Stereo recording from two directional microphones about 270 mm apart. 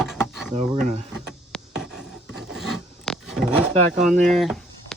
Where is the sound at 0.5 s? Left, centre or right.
Right.